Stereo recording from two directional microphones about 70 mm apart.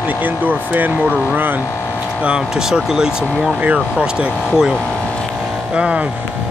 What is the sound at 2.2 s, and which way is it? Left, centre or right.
Speech, centre.